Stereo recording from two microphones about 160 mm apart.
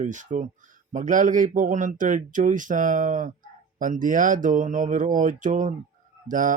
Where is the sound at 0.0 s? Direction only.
50° right (ahead or behind).